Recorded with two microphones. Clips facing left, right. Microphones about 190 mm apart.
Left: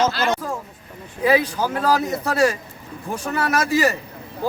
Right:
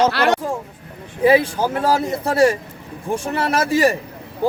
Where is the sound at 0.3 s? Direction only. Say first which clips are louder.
Right 4 dB; 30° right (ahead or behind).